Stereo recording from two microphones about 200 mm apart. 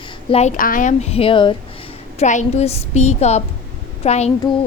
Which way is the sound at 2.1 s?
35° left (ahead or behind).